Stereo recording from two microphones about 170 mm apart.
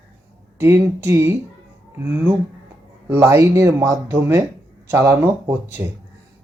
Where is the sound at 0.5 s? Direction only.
15° right (ahead or behind).